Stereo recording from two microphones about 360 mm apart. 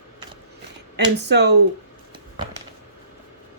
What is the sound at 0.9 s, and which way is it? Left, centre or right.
Speech, right.